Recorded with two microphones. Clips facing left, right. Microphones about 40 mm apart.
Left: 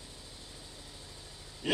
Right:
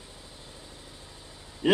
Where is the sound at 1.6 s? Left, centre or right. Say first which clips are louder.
Right 9 dB; right.